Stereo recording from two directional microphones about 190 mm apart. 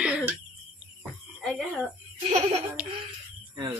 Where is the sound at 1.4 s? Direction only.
Centre (ahead or behind).